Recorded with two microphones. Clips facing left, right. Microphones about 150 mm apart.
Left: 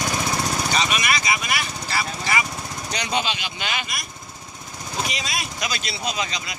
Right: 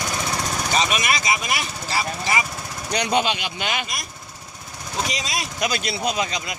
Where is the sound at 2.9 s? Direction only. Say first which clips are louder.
Right 5 dB; 55° right (ahead or behind).